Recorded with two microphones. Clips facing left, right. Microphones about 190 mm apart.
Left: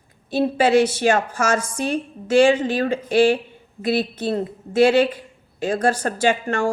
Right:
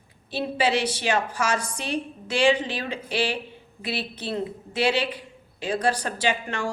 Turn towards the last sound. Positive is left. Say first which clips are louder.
# left 7 dB
turn(degrees=45)  # may be behind; listen again after turning